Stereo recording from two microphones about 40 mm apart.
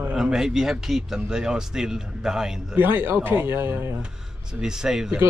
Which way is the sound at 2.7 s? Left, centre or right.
Right.